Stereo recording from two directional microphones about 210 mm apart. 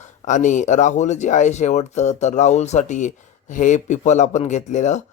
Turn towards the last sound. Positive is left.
turn(degrees=35)  # may be behind; listen again after turning